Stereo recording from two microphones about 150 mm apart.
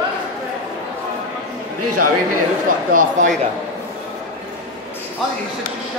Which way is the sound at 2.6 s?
65° right (ahead or behind).